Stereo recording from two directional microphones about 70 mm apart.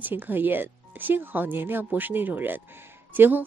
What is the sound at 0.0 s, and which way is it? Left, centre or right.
Speech, right.